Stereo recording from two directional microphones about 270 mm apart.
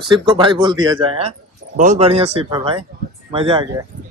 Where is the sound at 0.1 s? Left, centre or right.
Centre.